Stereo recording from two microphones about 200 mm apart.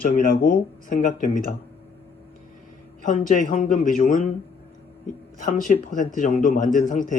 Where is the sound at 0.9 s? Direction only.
40° left (ahead or behind).